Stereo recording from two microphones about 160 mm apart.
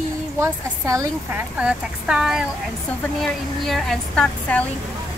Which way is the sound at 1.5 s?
5° right (ahead or behind).